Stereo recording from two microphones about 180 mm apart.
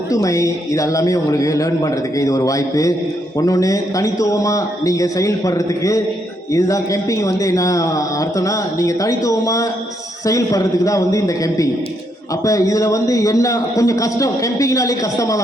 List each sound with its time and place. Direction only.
0.1 s speech: 20° left (ahead or behind)